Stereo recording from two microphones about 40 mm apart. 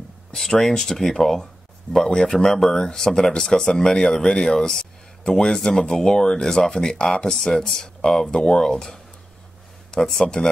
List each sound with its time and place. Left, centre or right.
0.4 s speech: centre
1.4 s a sound: centre
2.3 s speech: centre